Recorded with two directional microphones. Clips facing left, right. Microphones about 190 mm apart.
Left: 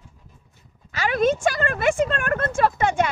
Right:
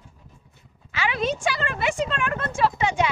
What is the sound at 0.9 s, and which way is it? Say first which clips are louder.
A woman's voice: left 5 dB; 45° left (ahead or behind).